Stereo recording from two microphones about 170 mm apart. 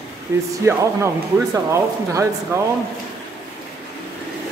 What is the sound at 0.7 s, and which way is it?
Speech, 15° right (ahead or behind).